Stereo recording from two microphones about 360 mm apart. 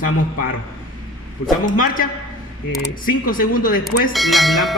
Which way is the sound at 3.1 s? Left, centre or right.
Left.